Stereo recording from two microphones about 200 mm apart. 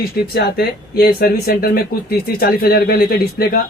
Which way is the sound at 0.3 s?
50° left (ahead or behind).